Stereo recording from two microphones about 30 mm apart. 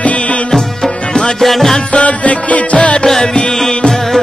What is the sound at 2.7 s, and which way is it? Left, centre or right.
Music, left.